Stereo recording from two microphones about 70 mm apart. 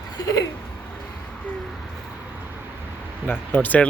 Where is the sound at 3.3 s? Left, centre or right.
Left.